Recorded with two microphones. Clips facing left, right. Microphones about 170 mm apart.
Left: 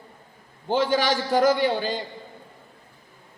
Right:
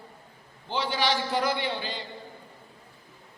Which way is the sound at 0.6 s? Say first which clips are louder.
Left 6 dB; 45° left (ahead or behind).